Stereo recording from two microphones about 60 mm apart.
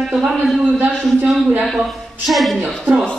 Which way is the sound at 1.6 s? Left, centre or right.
Centre.